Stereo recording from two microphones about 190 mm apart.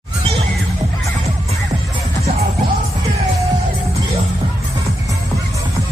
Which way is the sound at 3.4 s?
35° right (ahead or behind).